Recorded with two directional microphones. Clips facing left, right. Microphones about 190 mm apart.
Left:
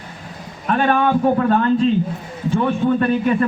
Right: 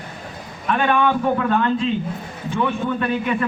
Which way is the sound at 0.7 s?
40° left (ahead or behind).